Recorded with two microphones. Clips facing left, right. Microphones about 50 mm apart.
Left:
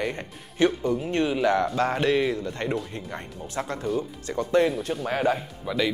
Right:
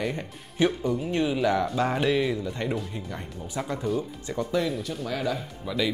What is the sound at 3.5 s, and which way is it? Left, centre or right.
Speech, centre.